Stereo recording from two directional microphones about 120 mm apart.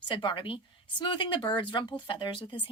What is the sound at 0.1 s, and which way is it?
A woman's voice, 40° left (ahead or behind).